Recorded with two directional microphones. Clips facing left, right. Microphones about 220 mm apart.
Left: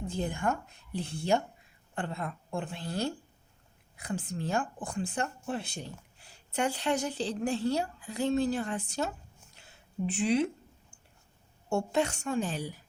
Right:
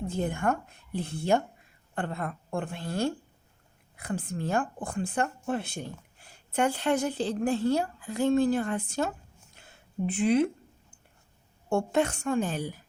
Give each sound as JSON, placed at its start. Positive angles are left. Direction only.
{"t": 0.1, "sound": "a woman's voice", "side_deg": -55}
{"t": 9.6, "sound": "a sound", "side_deg": -55}
{"t": 11.7, "sound": "a woman's voice", "side_deg": -55}